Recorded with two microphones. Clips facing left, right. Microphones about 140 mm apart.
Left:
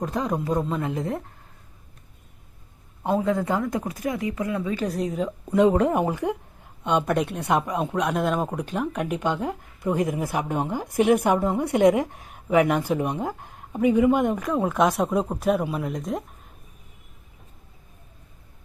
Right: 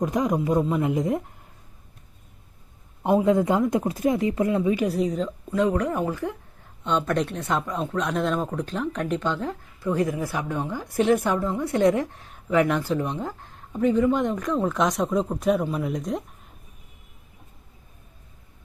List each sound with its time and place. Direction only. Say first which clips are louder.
0.0 s speech: right 3 dB; 10° right (ahead or behind)
3.0 s speech: right 4 dB; 15° right (ahead or behind)
4.9 s speech: right 3 dB; centre (ahead or behind)
5.2 s speech: left 4 dB; 20° left (ahead or behind); by 16.2 s centre (ahead or behind)